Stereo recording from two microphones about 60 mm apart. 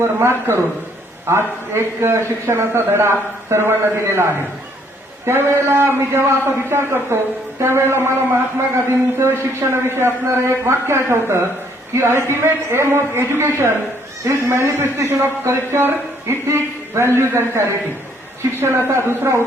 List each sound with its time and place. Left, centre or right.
0.0 s a man's voice: right
18.9 s a man's voice: right